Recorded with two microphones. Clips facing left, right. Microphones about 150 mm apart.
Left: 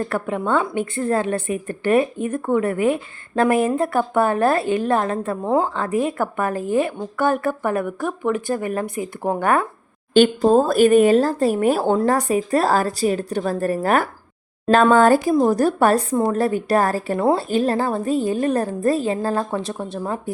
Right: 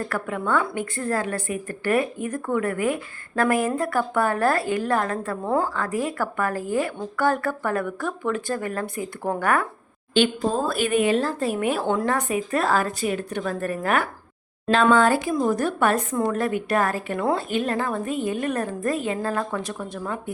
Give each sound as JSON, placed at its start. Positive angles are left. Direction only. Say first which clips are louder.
{"t": 0.0, "sound": "a woman's voice", "louder": "left 4 dB", "side_deg": 25}
{"t": 10.2, "sound": "speech", "louder": "left 7 dB", "side_deg": 45}